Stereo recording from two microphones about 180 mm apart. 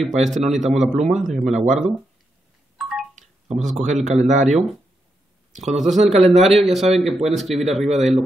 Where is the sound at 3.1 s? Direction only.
45° right (ahead or behind).